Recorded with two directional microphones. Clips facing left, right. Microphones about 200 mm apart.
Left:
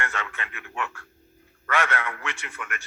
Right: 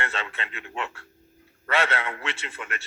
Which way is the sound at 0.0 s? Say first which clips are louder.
Right 1 dB; 20° right (ahead or behind).